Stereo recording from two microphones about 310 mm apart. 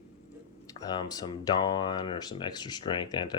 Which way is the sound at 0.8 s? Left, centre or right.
Centre.